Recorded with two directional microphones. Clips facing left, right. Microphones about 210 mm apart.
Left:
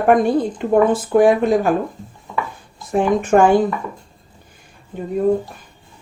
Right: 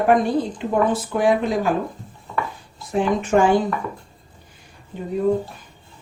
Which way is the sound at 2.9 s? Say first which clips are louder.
Left 4 dB; 50° left (ahead or behind).